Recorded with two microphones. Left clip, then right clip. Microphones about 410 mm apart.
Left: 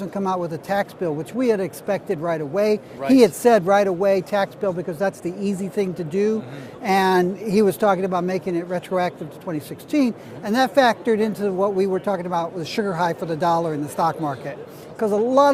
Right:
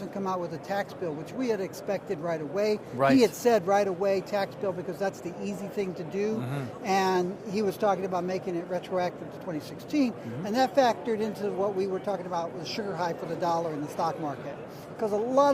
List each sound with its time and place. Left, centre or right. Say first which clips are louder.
0.0 s speech: left 8 dB; left